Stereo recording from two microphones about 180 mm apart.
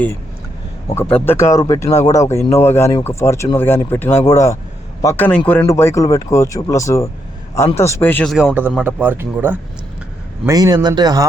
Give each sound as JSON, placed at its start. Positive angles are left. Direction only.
{"t": 0.9, "sound": "speech", "side_deg": 15}